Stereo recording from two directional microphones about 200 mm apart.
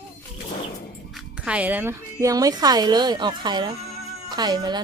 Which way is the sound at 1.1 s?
5° right (ahead or behind).